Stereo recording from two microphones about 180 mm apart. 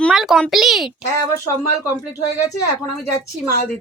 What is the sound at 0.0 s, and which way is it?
Speech, centre (ahead or behind).